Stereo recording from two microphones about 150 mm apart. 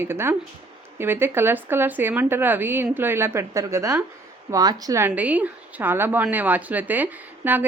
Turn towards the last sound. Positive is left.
turn(degrees=-10)  # may be behind; listen again after turning